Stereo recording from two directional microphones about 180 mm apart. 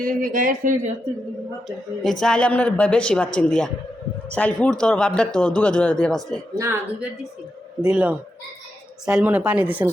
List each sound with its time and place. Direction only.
0.0 s speech: 50° right (ahead or behind)
1.6 s speech: centre (ahead or behind)
6.6 s speech: 10° right (ahead or behind)